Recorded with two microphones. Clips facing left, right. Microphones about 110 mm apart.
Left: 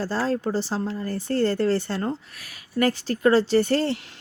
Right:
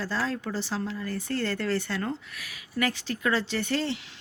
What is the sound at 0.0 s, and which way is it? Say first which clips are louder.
Speech: left 6 dB; 35° left (ahead or behind).